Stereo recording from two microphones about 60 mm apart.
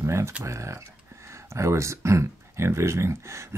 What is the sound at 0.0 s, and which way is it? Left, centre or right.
Speech, right.